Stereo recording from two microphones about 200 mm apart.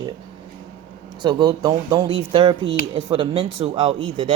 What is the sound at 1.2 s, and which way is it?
Speech, 20° right (ahead or behind).